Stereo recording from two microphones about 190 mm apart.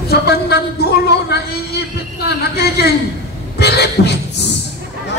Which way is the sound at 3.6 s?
60° left (ahead or behind).